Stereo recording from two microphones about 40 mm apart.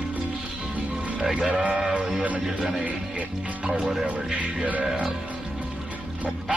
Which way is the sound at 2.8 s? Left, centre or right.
Right.